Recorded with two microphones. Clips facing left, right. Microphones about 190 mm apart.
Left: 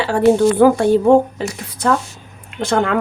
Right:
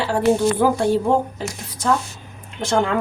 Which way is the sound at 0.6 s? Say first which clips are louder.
Left 6 dB; 65° left (ahead or behind).